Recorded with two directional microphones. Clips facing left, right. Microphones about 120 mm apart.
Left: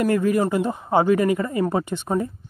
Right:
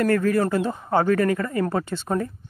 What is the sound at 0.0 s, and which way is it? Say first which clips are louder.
Speech: left 1 dB; 15° left (ahead or behind).